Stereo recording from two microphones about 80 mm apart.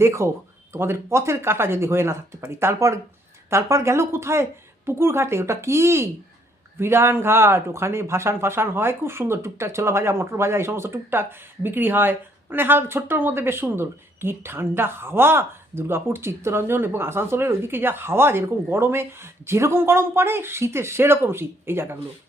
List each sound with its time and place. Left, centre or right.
0.0 s speech: right